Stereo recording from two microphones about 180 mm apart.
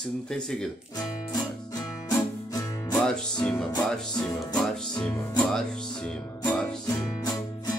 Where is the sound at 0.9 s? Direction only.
20° left (ahead or behind).